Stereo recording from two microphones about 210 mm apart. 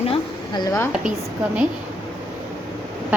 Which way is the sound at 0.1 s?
20° left (ahead or behind).